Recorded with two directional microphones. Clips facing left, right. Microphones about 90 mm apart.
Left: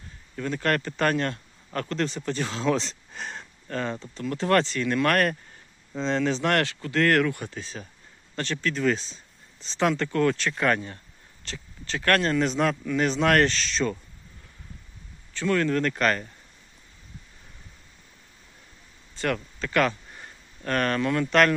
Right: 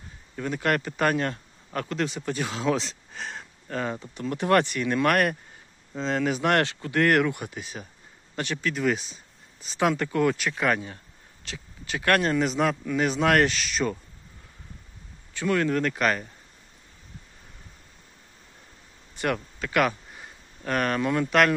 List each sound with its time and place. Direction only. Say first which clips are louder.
0.3 s speech: even; 15° right (ahead or behind)
3.7 s speech: even; 10° right (ahead or behind)
15.3 s speech: even; 15° right (ahead or behind)
19.1 s a sound: even; 15° right (ahead or behind)
21.2 s speech: left 1 dB; 5° right (ahead or behind)